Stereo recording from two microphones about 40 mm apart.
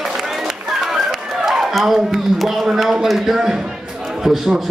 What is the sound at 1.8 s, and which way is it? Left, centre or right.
Speech, centre.